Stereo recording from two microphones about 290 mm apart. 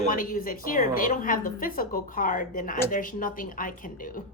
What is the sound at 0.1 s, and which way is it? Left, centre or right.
A woman's voice, left.